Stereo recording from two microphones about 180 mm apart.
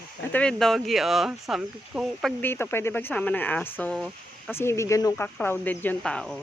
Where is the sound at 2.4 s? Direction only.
10° left (ahead or behind).